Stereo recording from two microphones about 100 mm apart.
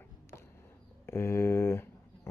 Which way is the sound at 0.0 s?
25° left (ahead or behind).